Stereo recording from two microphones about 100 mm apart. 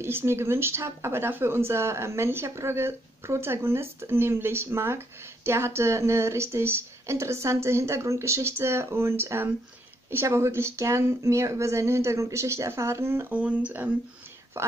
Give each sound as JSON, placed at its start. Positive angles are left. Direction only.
{"t": 0.0, "sound": "speech", "side_deg": -25}